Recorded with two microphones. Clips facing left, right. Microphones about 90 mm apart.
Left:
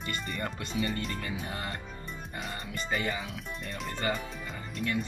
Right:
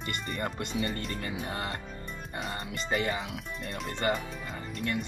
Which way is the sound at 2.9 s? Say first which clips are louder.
Right 2 dB; 45° right (ahead or behind).